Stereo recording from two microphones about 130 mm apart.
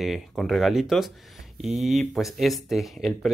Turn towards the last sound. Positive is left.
turn(degrees=0)  # may be behind; listen again after turning